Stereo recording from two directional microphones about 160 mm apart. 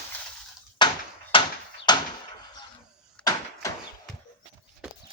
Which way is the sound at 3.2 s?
25° left (ahead or behind).